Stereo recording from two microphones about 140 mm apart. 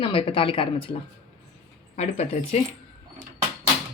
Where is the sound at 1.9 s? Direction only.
50° left (ahead or behind).